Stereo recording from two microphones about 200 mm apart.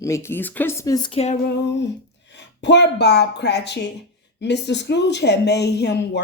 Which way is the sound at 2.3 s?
60° left (ahead or behind).